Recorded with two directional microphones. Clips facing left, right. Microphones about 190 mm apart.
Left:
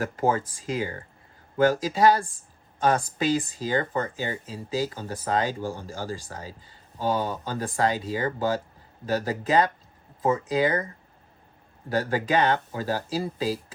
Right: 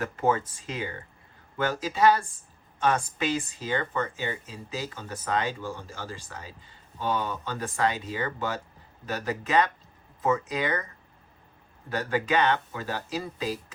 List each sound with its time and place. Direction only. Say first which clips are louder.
0.0 s speech: left 1 dB; 35° left (ahead or behind)